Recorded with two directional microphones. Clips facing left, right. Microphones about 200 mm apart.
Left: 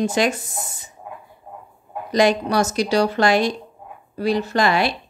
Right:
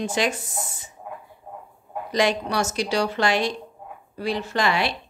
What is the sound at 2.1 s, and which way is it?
Speech, 40° left (ahead or behind).